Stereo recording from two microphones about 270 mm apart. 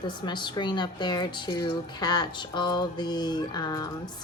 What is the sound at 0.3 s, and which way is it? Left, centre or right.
Speech, centre.